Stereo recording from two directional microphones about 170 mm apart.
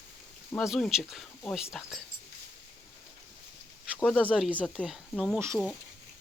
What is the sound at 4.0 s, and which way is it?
Speech, 5° left (ahead or behind).